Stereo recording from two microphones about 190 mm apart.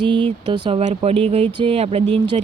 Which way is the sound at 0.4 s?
30° right (ahead or behind).